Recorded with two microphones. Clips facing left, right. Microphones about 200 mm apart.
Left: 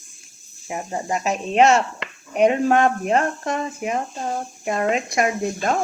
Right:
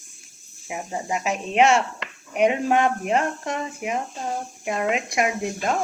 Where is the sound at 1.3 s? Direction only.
40° left (ahead or behind).